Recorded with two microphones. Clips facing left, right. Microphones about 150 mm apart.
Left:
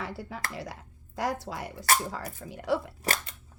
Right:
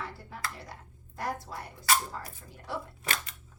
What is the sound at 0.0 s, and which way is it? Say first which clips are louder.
Speech: left 3 dB; 90° left.